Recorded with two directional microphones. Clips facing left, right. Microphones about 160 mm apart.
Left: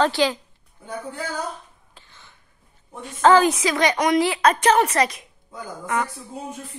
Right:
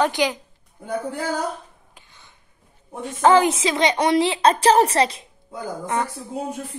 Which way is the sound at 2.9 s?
15° right (ahead or behind).